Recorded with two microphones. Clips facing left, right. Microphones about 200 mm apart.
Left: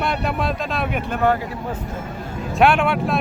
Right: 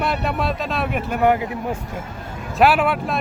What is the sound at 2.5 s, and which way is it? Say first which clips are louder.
Speech: even; 5° right (ahead or behind).